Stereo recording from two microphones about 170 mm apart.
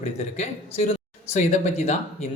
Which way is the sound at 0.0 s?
40° left (ahead or behind).